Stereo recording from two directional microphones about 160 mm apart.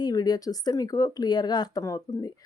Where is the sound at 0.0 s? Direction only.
25° left (ahead or behind).